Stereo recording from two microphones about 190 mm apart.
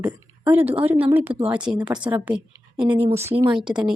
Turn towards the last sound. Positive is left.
turn(degrees=-5)  # may be behind; listen again after turning